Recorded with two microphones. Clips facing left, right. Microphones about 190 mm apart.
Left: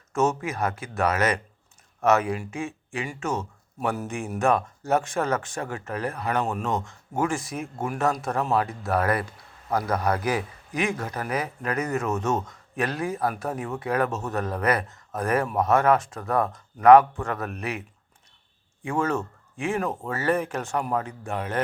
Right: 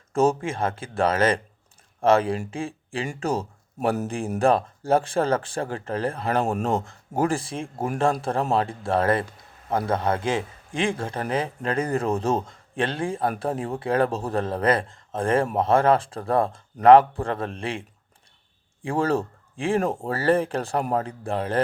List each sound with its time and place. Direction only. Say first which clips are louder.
0.1 s speech: right 3 dB; 30° right (ahead or behind)